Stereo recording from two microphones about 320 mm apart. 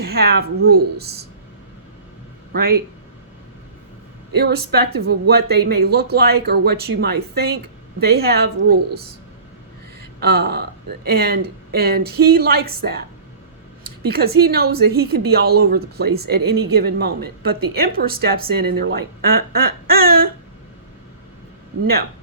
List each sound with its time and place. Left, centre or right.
0.0 s speech: right
2.5 s speech: right
4.4 s speech: right
10.2 s speech: right
14.1 s speech: right
16.0 s speech: right
16.3 s speech: right